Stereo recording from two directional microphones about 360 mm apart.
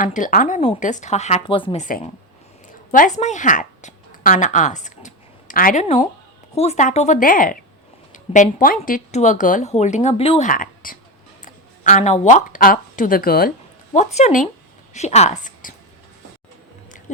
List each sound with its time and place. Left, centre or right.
0.0 s a woman's voice: left